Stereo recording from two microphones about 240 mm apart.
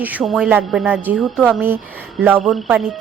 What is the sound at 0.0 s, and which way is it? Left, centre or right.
Speech, centre.